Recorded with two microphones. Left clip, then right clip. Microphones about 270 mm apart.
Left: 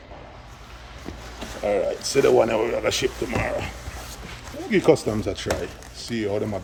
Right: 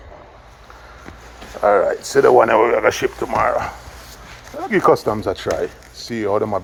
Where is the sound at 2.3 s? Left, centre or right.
Right.